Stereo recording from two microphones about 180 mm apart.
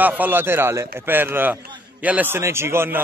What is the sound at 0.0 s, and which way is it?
Speech, 10° right (ahead or behind).